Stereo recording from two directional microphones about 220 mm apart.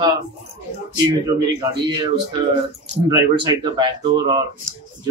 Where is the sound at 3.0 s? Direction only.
20° right (ahead or behind).